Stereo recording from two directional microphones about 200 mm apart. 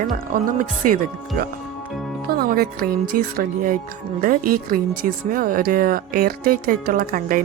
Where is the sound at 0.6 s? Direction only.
40° right (ahead or behind).